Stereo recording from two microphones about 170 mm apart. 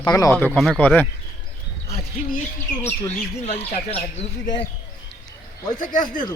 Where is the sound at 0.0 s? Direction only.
20° left (ahead or behind).